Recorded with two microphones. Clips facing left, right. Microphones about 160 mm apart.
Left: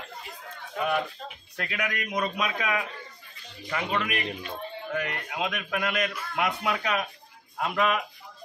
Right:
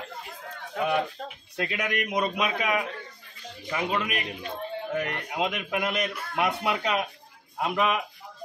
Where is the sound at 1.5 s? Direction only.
25° right (ahead or behind).